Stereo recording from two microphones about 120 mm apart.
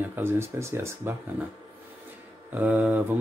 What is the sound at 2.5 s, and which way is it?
Speech, 15° right (ahead or behind).